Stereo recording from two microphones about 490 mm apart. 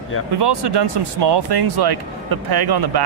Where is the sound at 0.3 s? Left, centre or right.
Right.